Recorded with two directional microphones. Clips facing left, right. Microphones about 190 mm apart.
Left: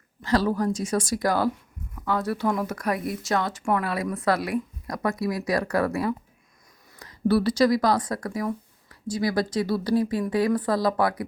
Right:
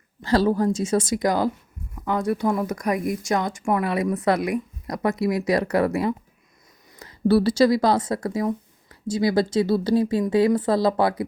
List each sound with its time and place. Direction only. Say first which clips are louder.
0.2 s speech: right 3 dB; 30° right (ahead or behind)